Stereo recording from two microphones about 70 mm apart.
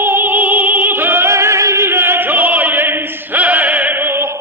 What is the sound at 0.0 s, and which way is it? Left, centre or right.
Opera, right.